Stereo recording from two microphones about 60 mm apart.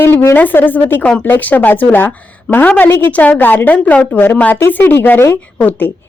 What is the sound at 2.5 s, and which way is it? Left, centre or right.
Speech, left.